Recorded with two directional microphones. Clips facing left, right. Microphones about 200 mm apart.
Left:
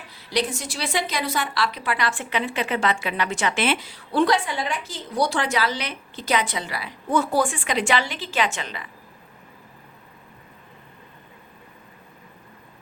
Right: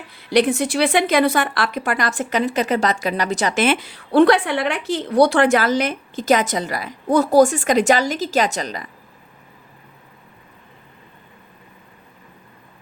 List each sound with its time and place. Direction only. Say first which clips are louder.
0.3 s a woman's voice: right 9 dB; 55° right (ahead or behind); by 8.9 s 40° right (ahead or behind)